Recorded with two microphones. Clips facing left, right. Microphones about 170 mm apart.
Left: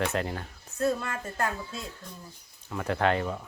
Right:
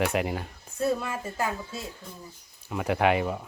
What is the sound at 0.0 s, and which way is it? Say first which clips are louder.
Speech: right 3 dB; 15° right (ahead or behind).